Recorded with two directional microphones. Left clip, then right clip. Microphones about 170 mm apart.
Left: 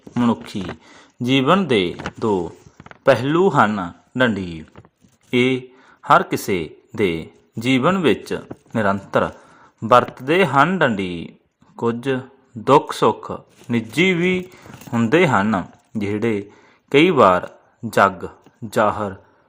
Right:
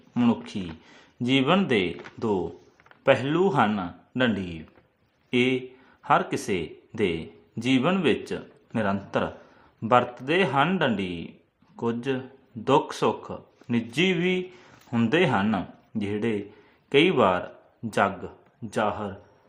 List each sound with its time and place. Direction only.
0.2 s speech: 25° left (ahead or behind)